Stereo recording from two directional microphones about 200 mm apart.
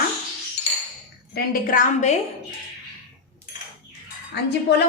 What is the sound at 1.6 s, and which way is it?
Speech, 40° left (ahead or behind).